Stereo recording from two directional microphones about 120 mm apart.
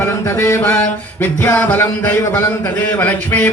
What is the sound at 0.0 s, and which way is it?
Mantra, 20° left (ahead or behind).